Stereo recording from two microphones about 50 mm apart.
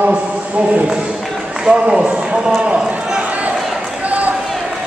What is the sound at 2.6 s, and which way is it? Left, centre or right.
Run, right.